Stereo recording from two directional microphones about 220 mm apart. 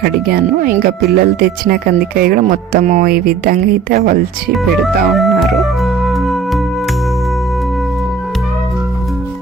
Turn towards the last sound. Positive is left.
turn(degrees=0)  # may be behind; listen again after turning